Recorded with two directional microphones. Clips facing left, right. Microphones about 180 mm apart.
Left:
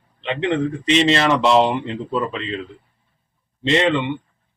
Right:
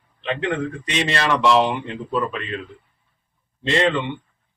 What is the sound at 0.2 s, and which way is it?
Speech, 20° left (ahead or behind).